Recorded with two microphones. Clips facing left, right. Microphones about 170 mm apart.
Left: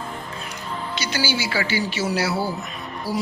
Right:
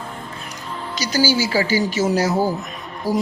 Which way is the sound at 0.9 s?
40° right (ahead or behind).